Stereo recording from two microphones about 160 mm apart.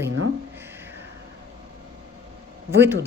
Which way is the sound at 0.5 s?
15° right (ahead or behind).